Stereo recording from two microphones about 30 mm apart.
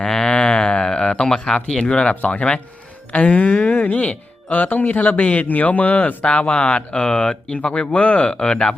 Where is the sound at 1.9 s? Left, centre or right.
Left.